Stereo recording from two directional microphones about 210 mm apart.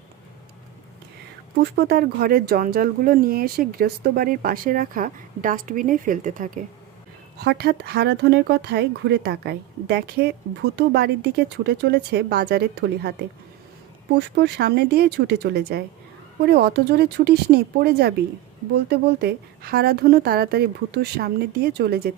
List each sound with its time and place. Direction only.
1.6 s speech: 50° right (ahead or behind)
7.3 s speech: 50° right (ahead or behind)
14.3 s speech: 50° right (ahead or behind)